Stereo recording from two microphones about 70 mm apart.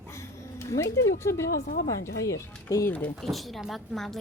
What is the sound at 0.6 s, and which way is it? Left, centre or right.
Speech, left.